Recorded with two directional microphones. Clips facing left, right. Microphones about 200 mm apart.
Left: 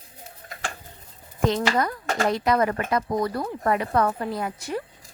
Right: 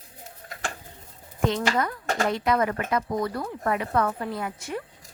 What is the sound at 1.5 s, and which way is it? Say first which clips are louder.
Speech: left 2 dB; 35° left (ahead or behind).